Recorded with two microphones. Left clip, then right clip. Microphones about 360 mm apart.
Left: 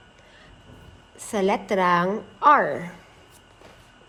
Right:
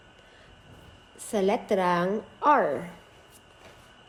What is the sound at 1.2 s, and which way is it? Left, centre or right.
A woman's voice, centre.